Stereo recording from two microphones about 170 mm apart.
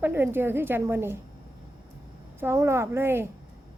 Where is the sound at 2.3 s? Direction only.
15° right (ahead or behind).